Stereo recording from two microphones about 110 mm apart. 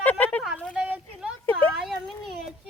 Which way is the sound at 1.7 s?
5° right (ahead or behind).